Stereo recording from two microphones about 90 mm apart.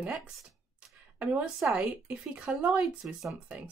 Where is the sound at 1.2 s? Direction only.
15° right (ahead or behind).